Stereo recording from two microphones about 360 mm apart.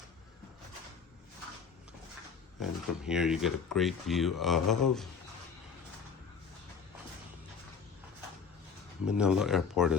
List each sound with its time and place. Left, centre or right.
2.6 s speech: centre
9.0 s speech: centre